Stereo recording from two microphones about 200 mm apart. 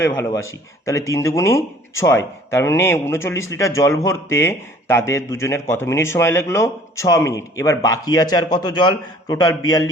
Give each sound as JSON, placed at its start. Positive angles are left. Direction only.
{"t": 0.0, "sound": "speech", "side_deg": 15}